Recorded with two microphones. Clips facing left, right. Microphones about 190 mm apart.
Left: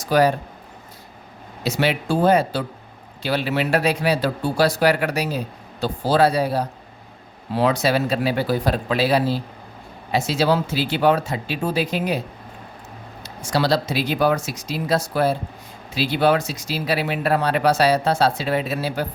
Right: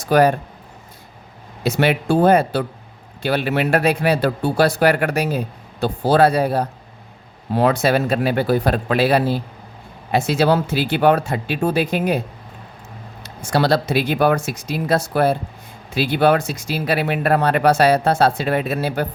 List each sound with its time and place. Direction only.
0.0 s speech: 55° right (ahead or behind)
1.6 s speech: 55° right (ahead or behind)
13.2 s speech: 55° right (ahead or behind)